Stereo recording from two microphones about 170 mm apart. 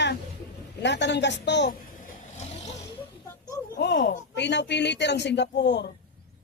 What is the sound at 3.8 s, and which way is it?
Speech, 85° left.